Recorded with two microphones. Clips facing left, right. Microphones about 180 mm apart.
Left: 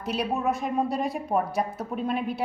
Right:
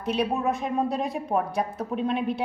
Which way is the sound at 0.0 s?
Centre (ahead or behind).